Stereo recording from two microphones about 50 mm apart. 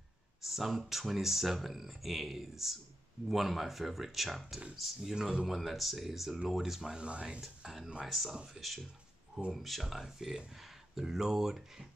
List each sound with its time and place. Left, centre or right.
0.4 s speech: centre
5.1 s speech: centre
5.5 s speech: centre